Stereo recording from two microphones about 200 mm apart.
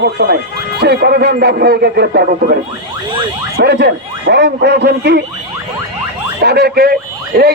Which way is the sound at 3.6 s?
55° right (ahead or behind).